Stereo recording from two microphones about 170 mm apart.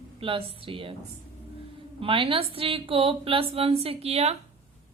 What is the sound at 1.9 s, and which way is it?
Speech, 30° right (ahead or behind).